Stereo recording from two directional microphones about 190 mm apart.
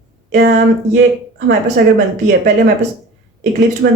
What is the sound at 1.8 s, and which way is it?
Speech, 55° right (ahead or behind).